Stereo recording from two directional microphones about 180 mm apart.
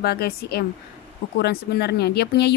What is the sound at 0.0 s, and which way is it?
A woman's voice, 65° left (ahead or behind).